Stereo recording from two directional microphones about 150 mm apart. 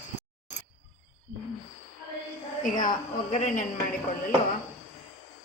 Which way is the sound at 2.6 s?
65° left (ahead or behind).